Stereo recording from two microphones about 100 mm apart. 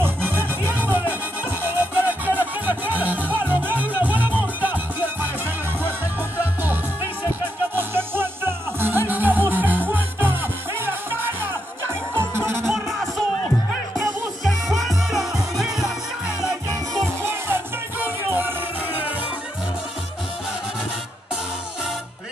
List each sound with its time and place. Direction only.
0.0 s music: 20° right (ahead or behind)
6.3 s music: 20° right (ahead or behind)
12.6 s music: centre (ahead or behind)
14.4 s music: centre (ahead or behind)
17.2 s music: 25° right (ahead or behind)